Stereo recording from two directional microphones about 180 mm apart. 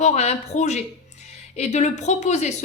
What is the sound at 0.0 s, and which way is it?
Speech, 40° left (ahead or behind).